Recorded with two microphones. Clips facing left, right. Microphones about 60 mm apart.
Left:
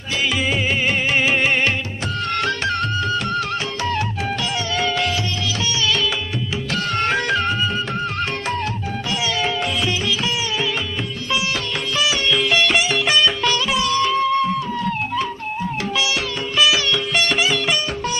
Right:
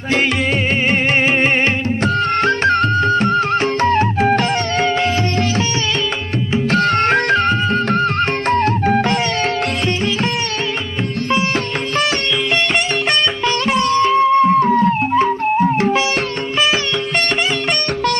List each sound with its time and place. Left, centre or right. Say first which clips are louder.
2.4 s music: right 7 dB; right
6.7 s music: right 6 dB; right
13.7 s music: right 9 dB; right